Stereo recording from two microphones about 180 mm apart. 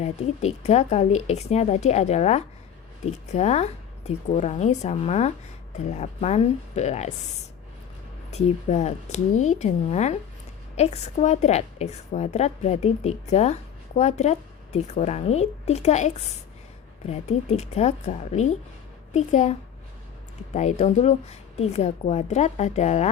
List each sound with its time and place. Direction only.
0.0 s a woman's voice: 35° left (ahead or behind)